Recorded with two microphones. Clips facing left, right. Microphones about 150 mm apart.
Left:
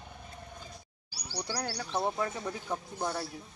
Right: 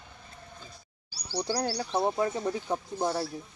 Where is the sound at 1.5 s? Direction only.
25° right (ahead or behind).